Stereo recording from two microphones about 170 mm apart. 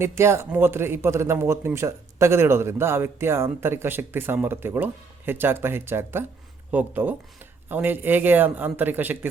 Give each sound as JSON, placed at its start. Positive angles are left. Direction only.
{"t": 0.0, "sound": "a man's voice", "side_deg": -15}